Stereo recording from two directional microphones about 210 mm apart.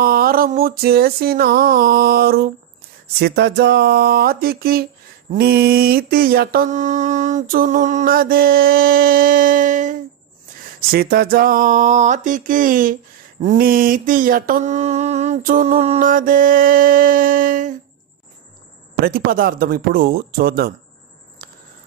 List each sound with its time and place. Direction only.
0.0 s mantra: 45° right (ahead or behind)
10.8 s a sound: 45° right (ahead or behind)
19.0 s mantra: 45° right (ahead or behind)